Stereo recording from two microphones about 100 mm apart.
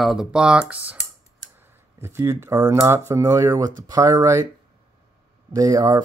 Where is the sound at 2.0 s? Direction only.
30° right (ahead or behind).